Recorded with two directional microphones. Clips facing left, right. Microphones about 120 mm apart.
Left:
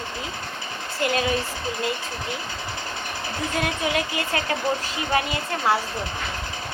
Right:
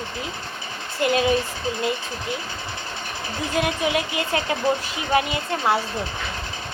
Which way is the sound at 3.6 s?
20° right (ahead or behind).